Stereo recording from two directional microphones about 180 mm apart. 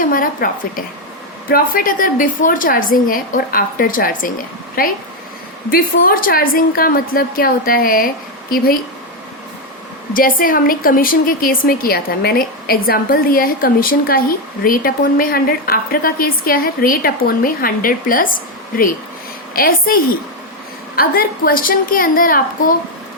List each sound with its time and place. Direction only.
0.0 s a woman's voice: 50° left (ahead or behind)
10.2 s a woman's voice: 50° left (ahead or behind)
19.5 s a woman's voice: 55° left (ahead or behind)